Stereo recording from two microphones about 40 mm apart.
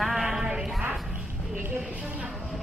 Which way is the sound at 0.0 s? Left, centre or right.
Centre.